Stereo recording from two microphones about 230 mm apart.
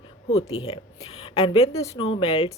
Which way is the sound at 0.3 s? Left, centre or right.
Left.